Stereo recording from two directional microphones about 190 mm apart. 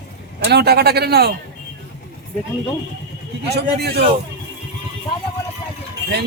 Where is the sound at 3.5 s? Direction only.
60° right (ahead or behind).